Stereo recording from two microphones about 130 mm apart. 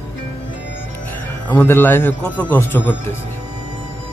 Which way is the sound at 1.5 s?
15° left (ahead or behind).